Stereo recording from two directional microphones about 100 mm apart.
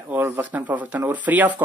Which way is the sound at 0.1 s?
20° right (ahead or behind).